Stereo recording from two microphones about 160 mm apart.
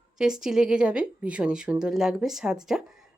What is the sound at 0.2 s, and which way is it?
Speech, 5° right (ahead or behind).